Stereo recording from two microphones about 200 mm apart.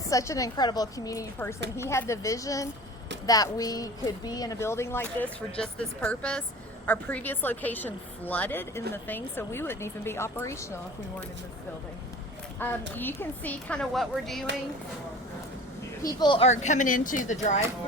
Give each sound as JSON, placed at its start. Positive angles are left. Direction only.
{"t": 0.1, "sound": "speech", "side_deg": 15}
{"t": 12.6, "sound": "speech", "side_deg": 10}
{"t": 16.0, "sound": "speech", "side_deg": 25}
{"t": 16.5, "sound": "speech", "side_deg": 35}